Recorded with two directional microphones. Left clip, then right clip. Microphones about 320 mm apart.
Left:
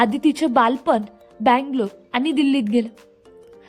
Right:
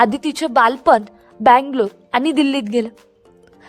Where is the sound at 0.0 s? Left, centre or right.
Centre.